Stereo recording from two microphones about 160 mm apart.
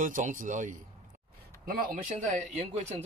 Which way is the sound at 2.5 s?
45° right (ahead or behind).